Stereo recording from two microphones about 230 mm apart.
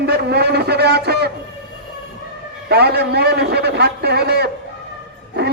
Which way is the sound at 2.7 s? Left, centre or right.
Right.